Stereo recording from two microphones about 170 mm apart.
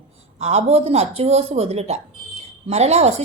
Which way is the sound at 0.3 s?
40° right (ahead or behind).